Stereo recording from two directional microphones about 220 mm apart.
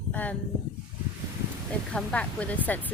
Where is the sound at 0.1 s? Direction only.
5° left (ahead or behind).